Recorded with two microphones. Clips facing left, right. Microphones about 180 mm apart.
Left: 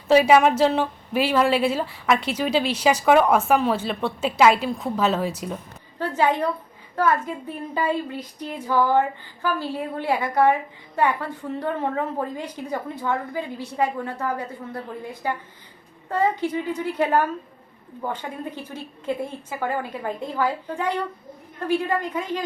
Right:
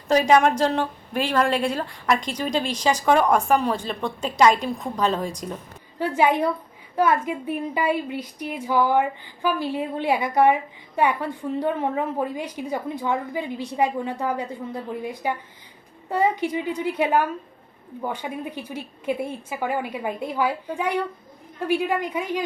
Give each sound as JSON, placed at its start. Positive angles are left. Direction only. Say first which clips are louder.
{"t": 0.1, "sound": "a woman's voice", "louder": "left 2 dB", "side_deg": 5}
{"t": 6.0, "sound": "a woman's voice", "louder": "right 1 dB", "side_deg": -15}